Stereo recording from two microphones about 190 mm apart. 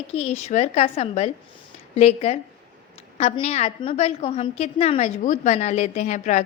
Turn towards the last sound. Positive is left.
turn(degrees=40)  # may be behind; listen again after turning